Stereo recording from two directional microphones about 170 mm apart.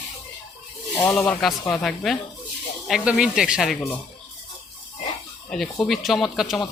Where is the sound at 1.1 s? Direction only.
Centre (ahead or behind).